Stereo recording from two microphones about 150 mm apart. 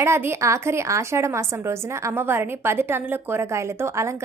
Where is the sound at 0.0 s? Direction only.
15° right (ahead or behind).